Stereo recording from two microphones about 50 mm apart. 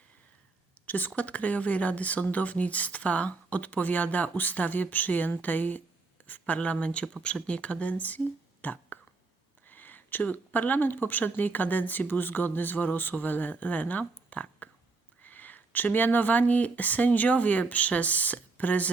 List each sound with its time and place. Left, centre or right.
0.9 s speech: left
8.6 s whispering: left
9.6 s speech: left
14.3 s a sound: left
15.2 s speech: left